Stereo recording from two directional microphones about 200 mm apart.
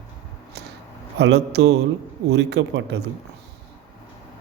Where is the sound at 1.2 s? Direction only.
55° right (ahead or behind).